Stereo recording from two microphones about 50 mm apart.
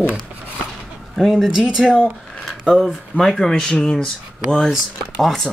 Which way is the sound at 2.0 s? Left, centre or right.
Centre.